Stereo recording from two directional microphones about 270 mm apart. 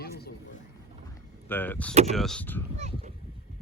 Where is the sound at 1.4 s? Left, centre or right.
Centre.